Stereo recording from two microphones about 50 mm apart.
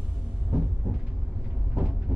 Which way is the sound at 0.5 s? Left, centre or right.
Centre.